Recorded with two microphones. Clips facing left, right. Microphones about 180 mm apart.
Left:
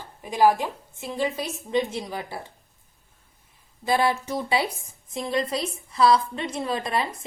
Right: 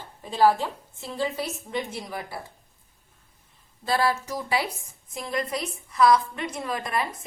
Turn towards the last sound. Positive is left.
turn(degrees=25)  # may be behind; listen again after turning